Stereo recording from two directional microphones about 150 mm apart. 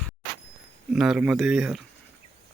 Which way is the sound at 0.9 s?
5° right (ahead or behind).